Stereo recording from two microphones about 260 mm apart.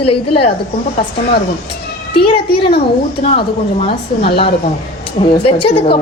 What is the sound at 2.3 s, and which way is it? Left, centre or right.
Speech, left.